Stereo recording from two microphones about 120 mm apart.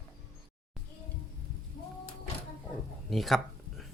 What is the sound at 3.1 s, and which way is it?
Speech, centre (ahead or behind).